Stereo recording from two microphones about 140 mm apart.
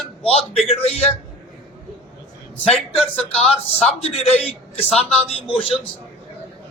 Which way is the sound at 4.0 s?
45° left (ahead or behind).